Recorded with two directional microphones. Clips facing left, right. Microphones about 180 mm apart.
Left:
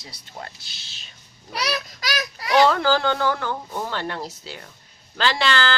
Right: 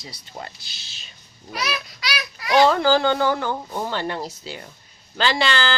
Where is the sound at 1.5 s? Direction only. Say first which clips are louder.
Left 1 dB; 35° left (ahead or behind).